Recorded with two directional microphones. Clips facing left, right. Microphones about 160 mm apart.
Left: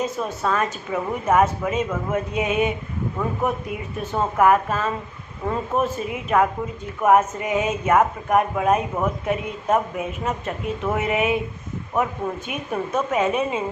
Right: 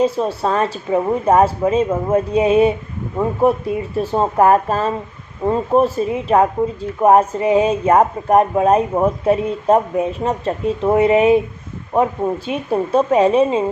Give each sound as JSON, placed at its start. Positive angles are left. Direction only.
{"t": 0.0, "sound": "speech", "side_deg": -30}